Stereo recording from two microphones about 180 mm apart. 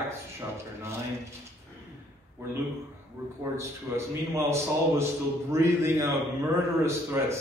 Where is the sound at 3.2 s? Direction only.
15° right (ahead or behind).